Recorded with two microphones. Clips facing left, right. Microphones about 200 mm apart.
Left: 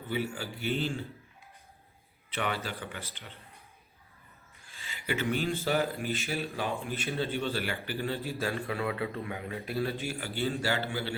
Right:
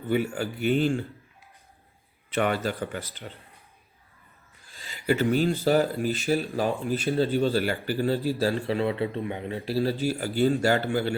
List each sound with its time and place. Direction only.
0.1 s speech: 50° right (ahead or behind)
2.3 s speech: 50° right (ahead or behind)
4.7 s a man's voice: 40° right (ahead or behind)